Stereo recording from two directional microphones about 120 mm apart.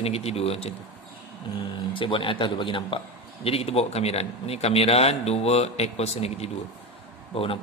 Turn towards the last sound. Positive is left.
turn(degrees=50)  # may be behind; listen again after turning